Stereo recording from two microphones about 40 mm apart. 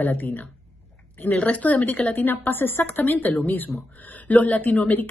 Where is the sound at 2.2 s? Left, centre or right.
Left.